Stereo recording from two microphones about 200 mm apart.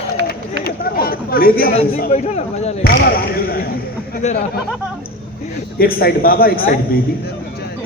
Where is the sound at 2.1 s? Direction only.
35° left (ahead or behind).